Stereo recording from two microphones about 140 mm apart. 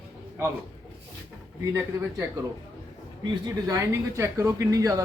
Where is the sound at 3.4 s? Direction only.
25° right (ahead or behind).